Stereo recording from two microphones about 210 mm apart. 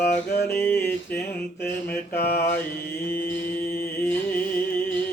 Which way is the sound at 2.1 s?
45° left (ahead or behind).